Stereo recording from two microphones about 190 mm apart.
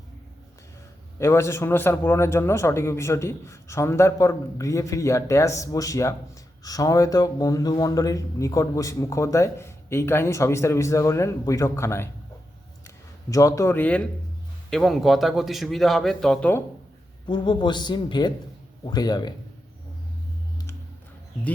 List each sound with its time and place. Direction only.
1.2 s speech: 15° left (ahead or behind)
13.3 s a man's voice: 15° left (ahead or behind)
17.2 s a man's voice: 25° left (ahead or behind)